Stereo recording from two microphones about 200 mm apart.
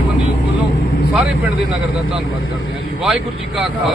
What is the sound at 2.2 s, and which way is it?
Speech, 90° left.